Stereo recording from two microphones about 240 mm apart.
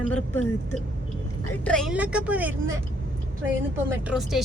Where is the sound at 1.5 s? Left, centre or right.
Centre.